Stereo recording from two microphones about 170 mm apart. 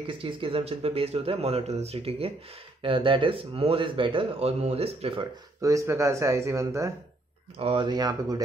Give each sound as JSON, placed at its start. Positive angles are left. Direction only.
{"t": 0.0, "sound": "speech", "side_deg": -30}
{"t": 5.6, "sound": "speech", "side_deg": -20}
{"t": 7.5, "sound": "speech", "side_deg": -30}